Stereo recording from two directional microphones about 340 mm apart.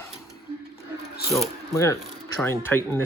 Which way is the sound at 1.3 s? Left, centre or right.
Centre.